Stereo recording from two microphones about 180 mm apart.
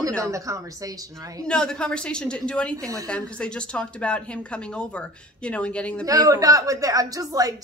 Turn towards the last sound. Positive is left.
turn(degrees=-20)  # may be behind; listen again after turning